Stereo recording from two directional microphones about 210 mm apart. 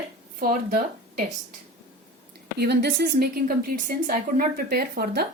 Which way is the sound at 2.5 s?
50° right (ahead or behind).